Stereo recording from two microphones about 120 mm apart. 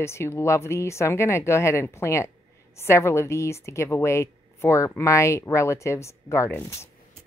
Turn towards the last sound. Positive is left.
turn(degrees=20)  # may be behind; listen again after turning